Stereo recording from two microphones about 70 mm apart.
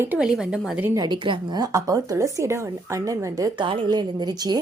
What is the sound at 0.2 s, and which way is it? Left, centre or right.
Speech, centre.